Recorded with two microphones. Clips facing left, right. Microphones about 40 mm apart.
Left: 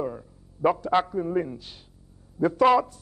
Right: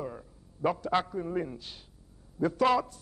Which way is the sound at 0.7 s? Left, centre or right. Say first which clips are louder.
Left 6 dB; centre.